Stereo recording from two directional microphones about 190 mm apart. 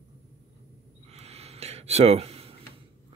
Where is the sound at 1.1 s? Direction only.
35° right (ahead or behind).